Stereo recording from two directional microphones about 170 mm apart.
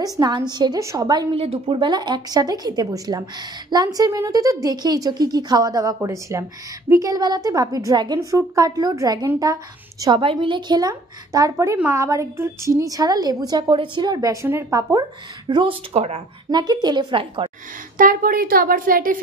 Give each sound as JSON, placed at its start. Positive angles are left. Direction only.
{"t": 0.0, "sound": "a woman's voice", "side_deg": -25}
{"t": 1.3, "sound": "a woman's voice", "side_deg": -35}
{"t": 16.4, "sound": "a woman's voice", "side_deg": -25}
{"t": 17.9, "sound": "a woman's voice", "side_deg": -55}